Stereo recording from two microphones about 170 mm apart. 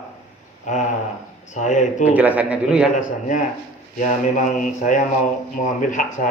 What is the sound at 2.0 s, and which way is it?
Speech, 10° right (ahead or behind).